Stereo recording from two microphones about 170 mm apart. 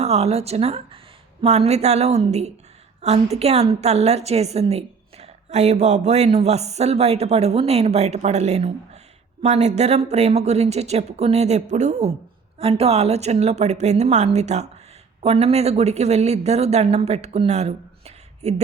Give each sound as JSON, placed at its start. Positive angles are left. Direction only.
{"t": 0.0, "sound": "a woman's voice", "side_deg": -40}